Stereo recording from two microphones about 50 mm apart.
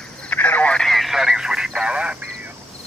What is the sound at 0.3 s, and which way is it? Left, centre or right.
Telephone, left.